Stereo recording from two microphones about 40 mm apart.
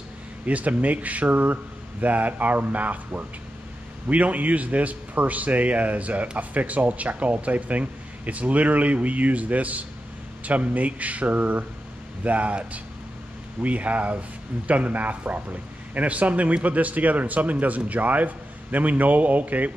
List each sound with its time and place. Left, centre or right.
0.5 s speech: right